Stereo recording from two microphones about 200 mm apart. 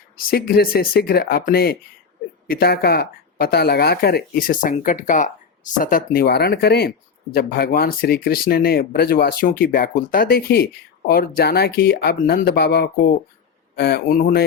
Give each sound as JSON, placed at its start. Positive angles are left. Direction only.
{"t": 0.3, "sound": "speech", "side_deg": 50}